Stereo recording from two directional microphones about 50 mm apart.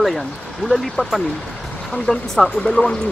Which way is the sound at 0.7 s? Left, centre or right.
Centre.